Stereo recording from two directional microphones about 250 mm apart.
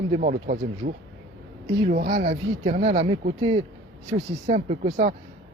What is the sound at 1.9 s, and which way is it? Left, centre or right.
Speech, right.